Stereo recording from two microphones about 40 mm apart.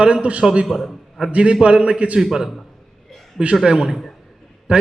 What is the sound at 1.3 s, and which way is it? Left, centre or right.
Speech, right.